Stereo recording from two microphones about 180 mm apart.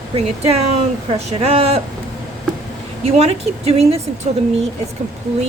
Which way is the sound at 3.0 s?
35° right (ahead or behind).